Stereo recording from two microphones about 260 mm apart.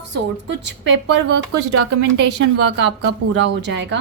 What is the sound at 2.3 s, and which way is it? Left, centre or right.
A woman's voice, right.